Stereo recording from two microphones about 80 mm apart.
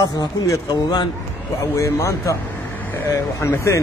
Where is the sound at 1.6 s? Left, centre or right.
Left.